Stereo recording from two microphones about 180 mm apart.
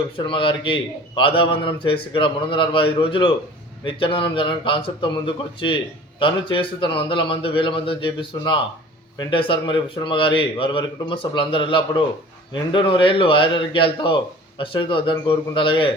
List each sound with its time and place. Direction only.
0.2 s speech: 30° left (ahead or behind)